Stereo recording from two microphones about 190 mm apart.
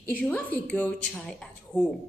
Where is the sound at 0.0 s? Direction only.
10° left (ahead or behind).